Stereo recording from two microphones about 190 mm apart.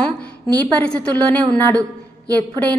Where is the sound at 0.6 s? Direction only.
10° left (ahead or behind).